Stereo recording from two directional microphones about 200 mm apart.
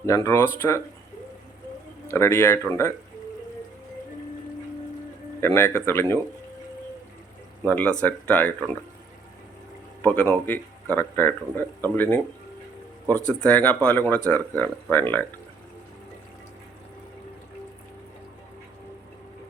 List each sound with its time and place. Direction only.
0.0 s speech: 15° left (ahead or behind)
2.0 s speech: 15° left (ahead or behind)
5.4 s speech: 10° left (ahead or behind)
7.7 s speech: 10° left (ahead or behind)
10.0 s speech: 10° left (ahead or behind)
13.2 s speech: 5° left (ahead or behind)